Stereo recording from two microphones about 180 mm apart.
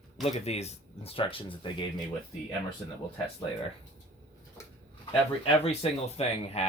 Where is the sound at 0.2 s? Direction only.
35° left (ahead or behind).